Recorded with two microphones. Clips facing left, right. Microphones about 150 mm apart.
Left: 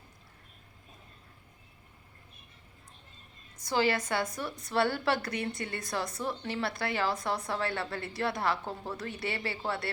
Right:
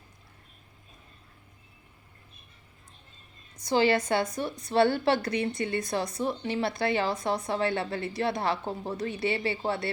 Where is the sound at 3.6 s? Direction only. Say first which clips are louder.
Right 5 dB; 25° right (ahead or behind).